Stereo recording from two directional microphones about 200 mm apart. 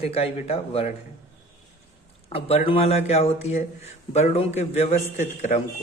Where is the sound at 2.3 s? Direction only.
30° left (ahead or behind).